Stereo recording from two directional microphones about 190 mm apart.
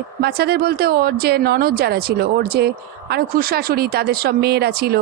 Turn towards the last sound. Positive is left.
turn(degrees=-55)  # may be behind; listen again after turning